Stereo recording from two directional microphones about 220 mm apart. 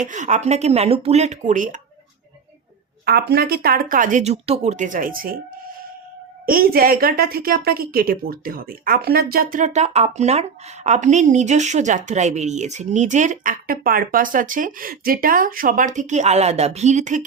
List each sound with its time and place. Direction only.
0.0 s speech: 35° right (ahead or behind)
3.1 s speech: 45° right (ahead or behind)
6.4 s speech: 40° right (ahead or behind)